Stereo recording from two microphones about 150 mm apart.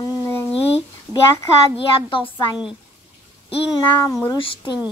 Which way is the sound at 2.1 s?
35° left (ahead or behind).